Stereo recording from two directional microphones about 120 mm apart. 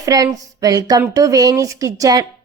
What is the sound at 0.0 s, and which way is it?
Speech, 30° right (ahead or behind).